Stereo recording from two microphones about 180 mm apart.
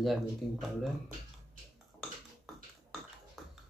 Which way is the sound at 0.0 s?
Centre (ahead or behind).